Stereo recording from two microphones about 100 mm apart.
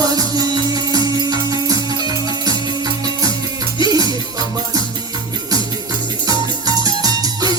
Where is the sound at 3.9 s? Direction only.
40° right (ahead or behind).